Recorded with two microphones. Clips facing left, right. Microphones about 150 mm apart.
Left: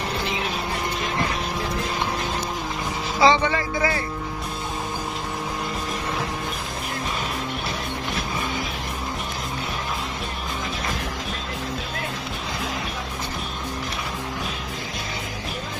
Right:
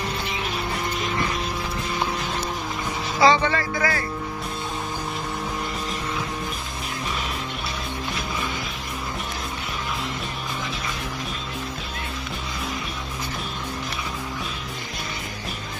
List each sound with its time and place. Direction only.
3.2 s speech: 15° left (ahead or behind)